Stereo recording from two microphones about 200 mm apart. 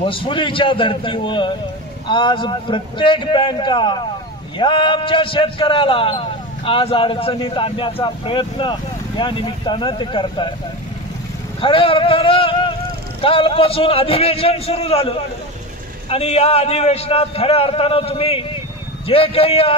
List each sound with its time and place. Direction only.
0.0 s a man's voice: 25° left (ahead or behind)
11.6 s a man's voice: 25° left (ahead or behind)